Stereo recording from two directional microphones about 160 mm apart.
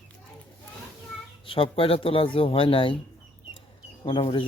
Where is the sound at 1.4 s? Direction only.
35° left (ahead or behind).